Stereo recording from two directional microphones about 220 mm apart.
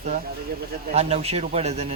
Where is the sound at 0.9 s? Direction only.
30° right (ahead or behind).